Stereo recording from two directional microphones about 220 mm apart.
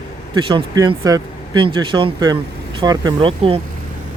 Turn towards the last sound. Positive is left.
turn(degrees=-25)  # may be behind; listen again after turning